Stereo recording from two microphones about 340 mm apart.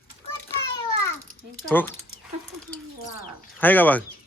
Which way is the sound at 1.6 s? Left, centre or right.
Centre.